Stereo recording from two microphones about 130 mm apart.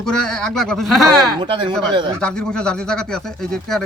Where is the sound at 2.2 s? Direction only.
5° left (ahead or behind).